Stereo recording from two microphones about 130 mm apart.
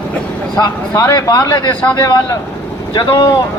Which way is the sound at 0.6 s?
25° left (ahead or behind).